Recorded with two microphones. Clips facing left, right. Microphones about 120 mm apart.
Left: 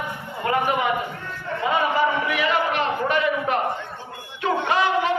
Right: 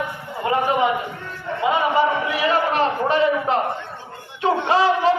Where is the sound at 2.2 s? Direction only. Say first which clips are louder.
Right 2 dB; 35° right (ahead or behind).